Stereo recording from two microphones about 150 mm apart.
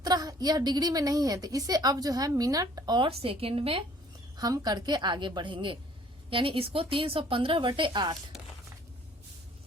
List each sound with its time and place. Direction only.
0.0 s a woman's voice: 25° right (ahead or behind)
4.4 s a woman's voice: 25° right (ahead or behind)
8.3 s a sound: centre (ahead or behind)